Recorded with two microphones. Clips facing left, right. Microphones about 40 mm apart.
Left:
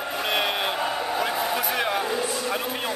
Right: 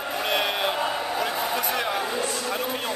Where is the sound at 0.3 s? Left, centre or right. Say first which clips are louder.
Even; centre.